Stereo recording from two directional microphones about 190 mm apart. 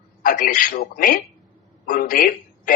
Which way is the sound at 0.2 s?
45° left (ahead or behind).